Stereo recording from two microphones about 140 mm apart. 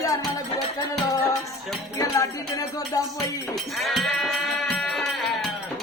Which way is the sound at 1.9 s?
25° left (ahead or behind).